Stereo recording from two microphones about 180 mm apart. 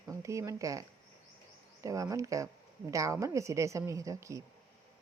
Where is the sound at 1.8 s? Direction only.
20° right (ahead or behind).